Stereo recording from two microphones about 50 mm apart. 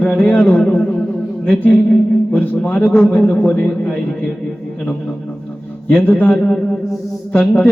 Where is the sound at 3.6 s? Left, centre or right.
Centre.